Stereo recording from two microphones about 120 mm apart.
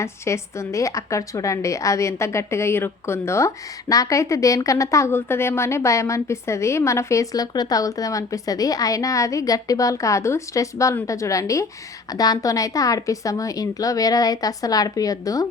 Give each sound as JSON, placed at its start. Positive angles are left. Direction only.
{"t": 0.0, "sound": "a woman's voice", "side_deg": 25}